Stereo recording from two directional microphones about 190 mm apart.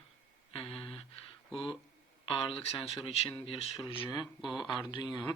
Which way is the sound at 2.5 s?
30° left (ahead or behind).